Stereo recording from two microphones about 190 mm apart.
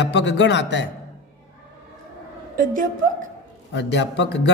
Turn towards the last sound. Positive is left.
turn(degrees=65)  # may be behind; listen again after turning